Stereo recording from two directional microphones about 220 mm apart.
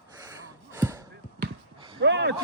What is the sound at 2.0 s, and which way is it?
Speech, 55° right (ahead or behind).